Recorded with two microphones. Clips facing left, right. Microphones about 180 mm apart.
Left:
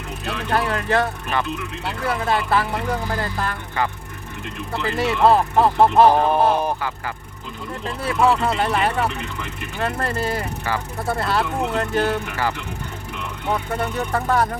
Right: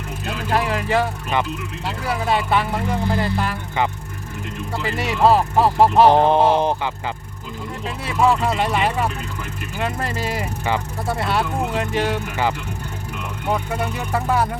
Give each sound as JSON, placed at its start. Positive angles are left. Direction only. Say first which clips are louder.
{"t": 0.4, "sound": "speech", "louder": "right 1 dB", "side_deg": -5}
{"t": 4.9, "sound": "speech", "louder": "even", "side_deg": -5}
{"t": 6.1, "sound": "speech", "louder": "right 2 dB", "side_deg": -20}
{"t": 7.9, "sound": "speech", "louder": "even", "side_deg": 0}
{"t": 13.5, "sound": "music", "louder": "even", "side_deg": -5}